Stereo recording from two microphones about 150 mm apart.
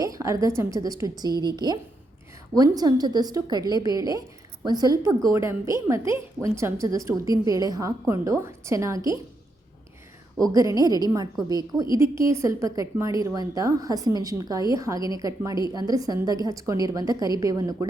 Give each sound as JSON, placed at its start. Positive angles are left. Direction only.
{"t": 0.0, "sound": "a woman's voice", "side_deg": -20}
{"t": 10.5, "sound": "a woman's voice", "side_deg": -25}